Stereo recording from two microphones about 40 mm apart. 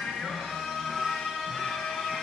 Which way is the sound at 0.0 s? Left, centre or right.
Centre.